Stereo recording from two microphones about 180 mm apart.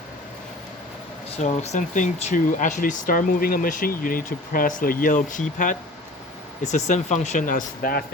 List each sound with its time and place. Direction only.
1.4 s speech: 40° left (ahead or behind)